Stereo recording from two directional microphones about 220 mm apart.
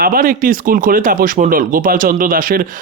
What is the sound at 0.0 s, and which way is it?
Speech, 40° right (ahead or behind).